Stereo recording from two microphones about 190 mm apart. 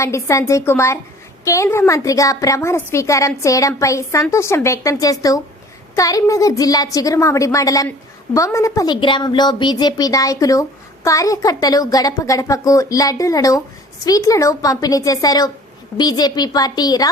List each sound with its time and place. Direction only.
0.0 s a woman's voice: 15° left (ahead or behind)